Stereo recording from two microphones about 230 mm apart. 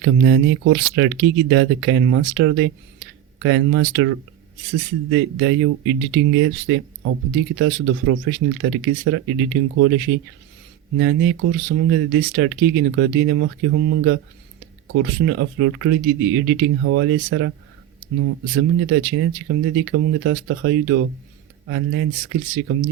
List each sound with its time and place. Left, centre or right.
0.0 s speech: right